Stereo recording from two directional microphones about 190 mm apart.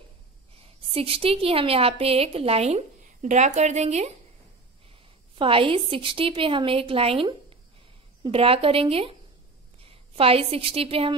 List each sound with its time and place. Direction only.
0.9 s a woman's voice: 30° right (ahead or behind)
5.3 s a woman's voice: 30° right (ahead or behind)